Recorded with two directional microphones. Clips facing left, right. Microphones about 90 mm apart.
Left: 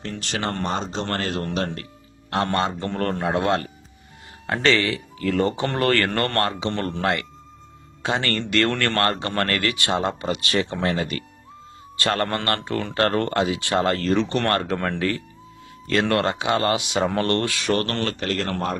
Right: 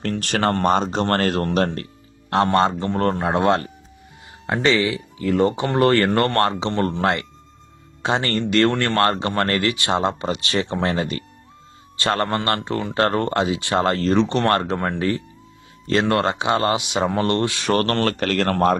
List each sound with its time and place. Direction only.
0.0 s speech: 55° right (ahead or behind)
2.3 s speech: 30° right (ahead or behind)
4.6 s speech: 15° right (ahead or behind)
17.7 s speech: 45° right (ahead or behind); by 18.8 s 60° right (ahead or behind)